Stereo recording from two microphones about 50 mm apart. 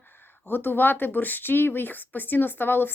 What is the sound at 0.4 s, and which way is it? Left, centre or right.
A woman's voice, left.